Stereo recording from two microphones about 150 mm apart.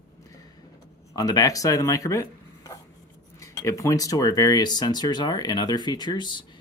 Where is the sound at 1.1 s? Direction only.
25° left (ahead or behind).